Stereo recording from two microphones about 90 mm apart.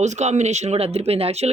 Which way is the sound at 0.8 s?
90° right.